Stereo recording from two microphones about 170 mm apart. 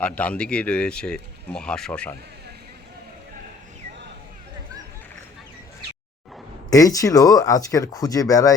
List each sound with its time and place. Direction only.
0.0 s speech: 10° left (ahead or behind)
6.7 s speech: 20° left (ahead or behind)